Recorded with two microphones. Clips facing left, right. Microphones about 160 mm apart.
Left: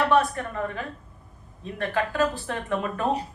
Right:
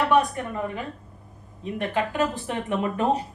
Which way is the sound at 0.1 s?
15° right (ahead or behind).